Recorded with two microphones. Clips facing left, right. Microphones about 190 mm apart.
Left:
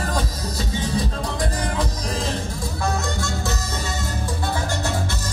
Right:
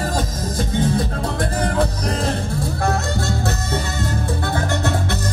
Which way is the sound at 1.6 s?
60° right (ahead or behind).